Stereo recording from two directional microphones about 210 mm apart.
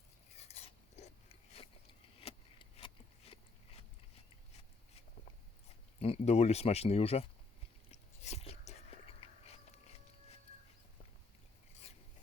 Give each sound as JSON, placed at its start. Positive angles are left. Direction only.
{"t": 0.3, "sound": "biting", "side_deg": 30}
{"t": 2.2, "sound": "a sound", "side_deg": 25}
{"t": 6.0, "sound": "speech", "side_deg": 30}
{"t": 7.9, "sound": "whispering", "side_deg": 30}